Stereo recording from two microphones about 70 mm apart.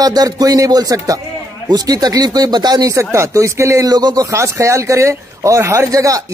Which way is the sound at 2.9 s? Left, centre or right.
Right.